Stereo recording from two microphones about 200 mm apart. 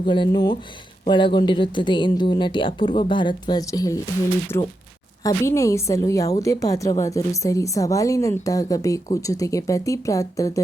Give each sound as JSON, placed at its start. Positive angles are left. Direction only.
{"t": 0.1, "sound": "speech", "side_deg": 20}
{"t": 4.5, "sound": "speech", "side_deg": 25}
{"t": 5.2, "sound": "a woman's voice", "side_deg": 15}